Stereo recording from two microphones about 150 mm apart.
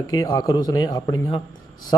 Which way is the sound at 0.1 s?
25° left (ahead or behind).